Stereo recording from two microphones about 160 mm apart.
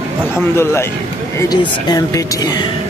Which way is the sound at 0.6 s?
15° left (ahead or behind).